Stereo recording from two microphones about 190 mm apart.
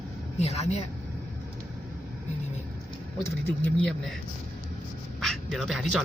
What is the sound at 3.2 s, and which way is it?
Speech, 10° left (ahead or behind).